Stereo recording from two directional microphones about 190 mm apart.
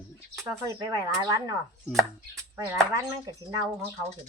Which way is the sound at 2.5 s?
20° right (ahead or behind).